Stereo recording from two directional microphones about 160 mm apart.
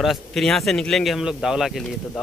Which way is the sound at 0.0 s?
Centre (ahead or behind).